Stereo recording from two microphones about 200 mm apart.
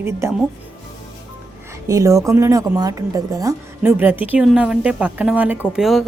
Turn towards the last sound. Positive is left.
turn(degrees=0)  # may be behind; listen again after turning